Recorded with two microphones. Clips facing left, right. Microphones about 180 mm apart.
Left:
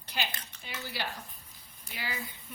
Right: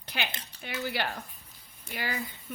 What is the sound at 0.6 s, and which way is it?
Dishes, 65° right (ahead or behind).